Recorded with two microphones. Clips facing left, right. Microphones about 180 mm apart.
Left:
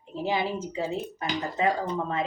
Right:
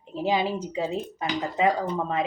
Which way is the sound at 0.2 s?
15° right (ahead or behind).